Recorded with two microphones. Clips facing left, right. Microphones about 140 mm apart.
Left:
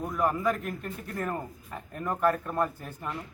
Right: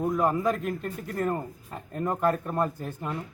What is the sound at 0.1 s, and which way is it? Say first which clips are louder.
Speech: even; 25° right (ahead or behind).